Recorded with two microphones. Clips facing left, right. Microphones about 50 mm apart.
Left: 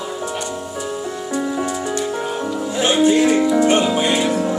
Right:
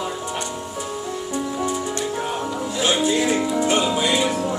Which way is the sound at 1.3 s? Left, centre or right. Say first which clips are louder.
Left 3 dB; left.